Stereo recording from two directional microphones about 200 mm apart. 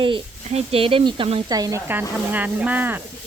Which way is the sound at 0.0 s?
30° right (ahead or behind).